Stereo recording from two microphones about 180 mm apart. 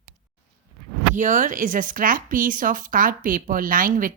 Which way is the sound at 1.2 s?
45° right (ahead or behind).